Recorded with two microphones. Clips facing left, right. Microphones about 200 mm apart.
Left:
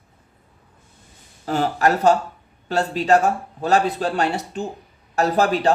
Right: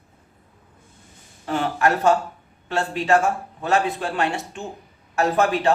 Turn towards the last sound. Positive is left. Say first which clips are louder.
# left 1 dB
turn(degrees=35)  # may be behind; listen again after turning